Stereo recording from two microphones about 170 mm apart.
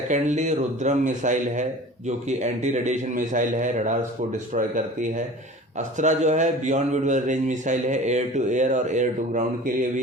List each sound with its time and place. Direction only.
0.1 s a man's voice: 45° right (ahead or behind)